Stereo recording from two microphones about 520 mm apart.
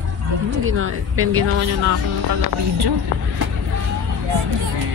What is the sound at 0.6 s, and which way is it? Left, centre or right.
Speech, right.